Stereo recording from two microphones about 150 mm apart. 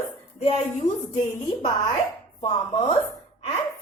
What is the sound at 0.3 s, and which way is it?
Speech, 45° left (ahead or behind).